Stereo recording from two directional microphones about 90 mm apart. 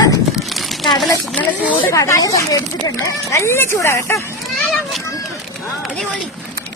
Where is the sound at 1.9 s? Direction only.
35° left (ahead or behind).